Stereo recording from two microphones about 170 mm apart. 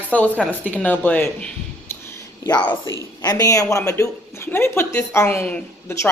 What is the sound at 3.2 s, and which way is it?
A woman's voice, 20° left (ahead or behind).